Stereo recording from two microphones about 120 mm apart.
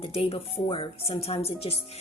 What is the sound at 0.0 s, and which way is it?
Speech, 55° left (ahead or behind).